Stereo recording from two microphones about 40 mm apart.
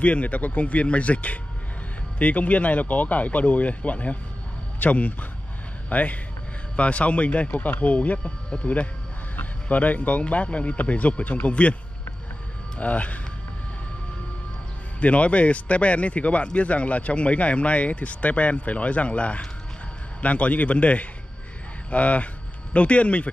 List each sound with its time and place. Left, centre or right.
0.0 s speech: left
8.2 s speech: left
9.4 s speech: left
12.7 s speech: left
15.0 s speech: left